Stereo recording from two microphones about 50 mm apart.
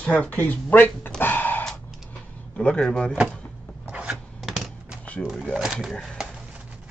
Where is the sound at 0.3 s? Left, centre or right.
Left.